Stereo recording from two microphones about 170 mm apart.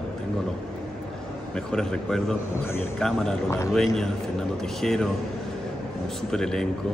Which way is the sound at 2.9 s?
5° left (ahead or behind).